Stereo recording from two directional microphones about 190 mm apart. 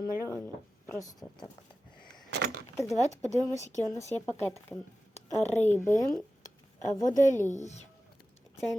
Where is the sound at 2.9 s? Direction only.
35° left (ahead or behind).